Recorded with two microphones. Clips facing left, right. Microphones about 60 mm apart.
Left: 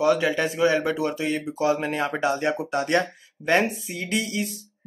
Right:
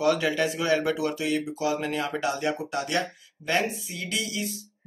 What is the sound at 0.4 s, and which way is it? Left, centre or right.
Speech, left.